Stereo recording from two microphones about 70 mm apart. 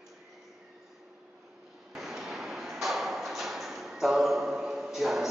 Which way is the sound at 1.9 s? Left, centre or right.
Centre.